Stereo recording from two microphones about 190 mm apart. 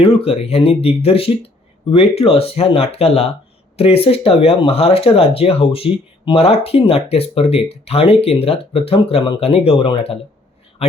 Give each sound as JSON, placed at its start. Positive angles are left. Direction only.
{"t": 0.0, "sound": "speech", "side_deg": 30}